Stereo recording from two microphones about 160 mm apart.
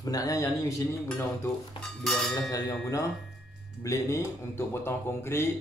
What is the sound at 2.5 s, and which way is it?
Speech, 20° left (ahead or behind).